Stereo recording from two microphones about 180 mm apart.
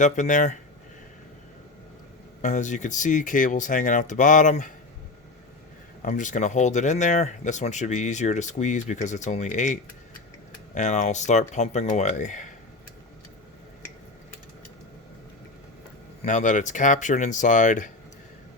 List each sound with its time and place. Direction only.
0.0 s speech: 45° left (ahead or behind)
2.4 s speech: 45° left (ahead or behind)
6.0 s speech: 45° left (ahead or behind)
10.8 s speech: 40° left (ahead or behind)
16.2 s speech: 45° left (ahead or behind)